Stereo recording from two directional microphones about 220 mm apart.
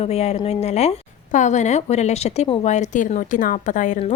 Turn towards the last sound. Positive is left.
turn(degrees=35)  # may be behind; listen again after turning